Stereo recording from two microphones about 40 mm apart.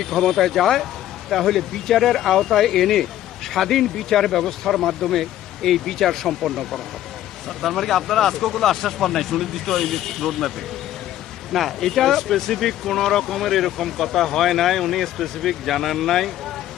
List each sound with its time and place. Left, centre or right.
0.0 s speech: centre
11.5 s speech: centre